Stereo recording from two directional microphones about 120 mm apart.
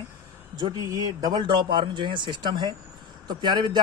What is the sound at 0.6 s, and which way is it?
Speech, 35° right (ahead or behind).